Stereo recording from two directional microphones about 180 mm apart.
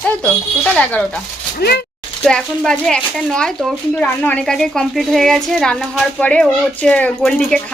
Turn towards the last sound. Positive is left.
turn(degrees=5)  # may be behind; listen again after turning